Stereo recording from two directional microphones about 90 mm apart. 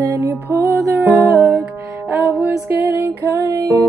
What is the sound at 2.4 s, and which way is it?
Music, 20° right (ahead or behind).